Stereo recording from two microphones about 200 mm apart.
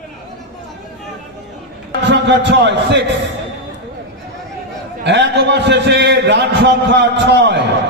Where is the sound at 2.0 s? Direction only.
60° right (ahead or behind).